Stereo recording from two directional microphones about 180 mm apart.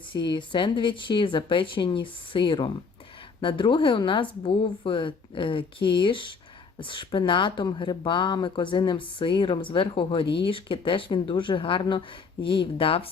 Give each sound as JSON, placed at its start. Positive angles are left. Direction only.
{"t": 0.1, "sound": "speech", "side_deg": 25}